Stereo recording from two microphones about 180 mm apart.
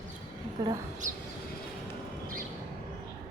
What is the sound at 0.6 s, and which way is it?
Speech, 20° right (ahead or behind).